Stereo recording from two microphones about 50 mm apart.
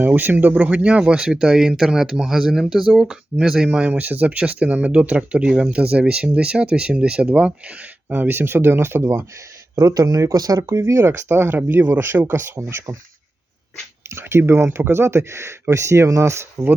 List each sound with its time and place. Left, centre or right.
0.0 s speech: right; by 3.7 s centre
3.7 s speech: right
8.1 s speech: right
9.7 s speech: right
11.0 s speech: right
14.1 s speech: right